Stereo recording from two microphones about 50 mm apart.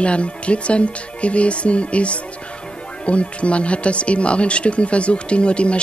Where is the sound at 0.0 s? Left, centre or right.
Left.